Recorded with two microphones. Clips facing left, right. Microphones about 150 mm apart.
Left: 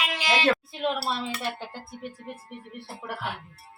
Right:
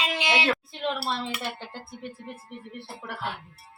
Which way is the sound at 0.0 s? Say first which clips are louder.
Even; 25° right (ahead or behind).